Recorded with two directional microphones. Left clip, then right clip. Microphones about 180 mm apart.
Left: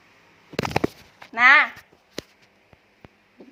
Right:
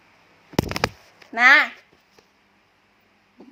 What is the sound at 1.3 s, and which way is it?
Speech, 45° right (ahead or behind).